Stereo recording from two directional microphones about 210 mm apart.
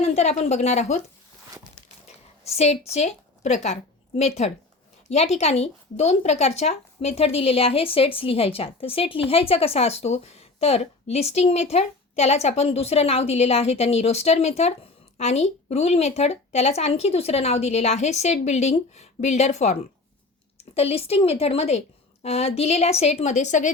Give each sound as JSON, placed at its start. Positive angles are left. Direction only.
{"t": 0.0, "sound": "a woman's voice", "side_deg": 30}
{"t": 2.4, "sound": "a woman's voice", "side_deg": 30}